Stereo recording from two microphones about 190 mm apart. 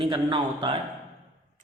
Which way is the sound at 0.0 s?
25° right (ahead or behind).